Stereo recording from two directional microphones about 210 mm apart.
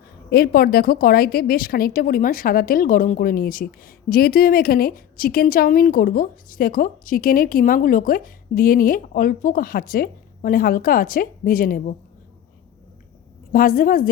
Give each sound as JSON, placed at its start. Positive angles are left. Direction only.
{"t": 0.3, "sound": "a woman's voice", "side_deg": 45}
{"t": 13.5, "sound": "a woman's voice", "side_deg": 40}